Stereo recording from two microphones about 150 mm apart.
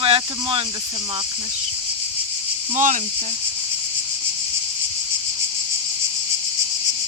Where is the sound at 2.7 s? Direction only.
55° right (ahead or behind).